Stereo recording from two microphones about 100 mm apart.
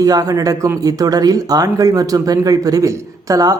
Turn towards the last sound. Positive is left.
turn(degrees=-35)  # may be behind; listen again after turning